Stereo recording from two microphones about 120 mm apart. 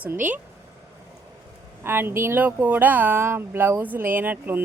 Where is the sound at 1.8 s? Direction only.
20° right (ahead or behind).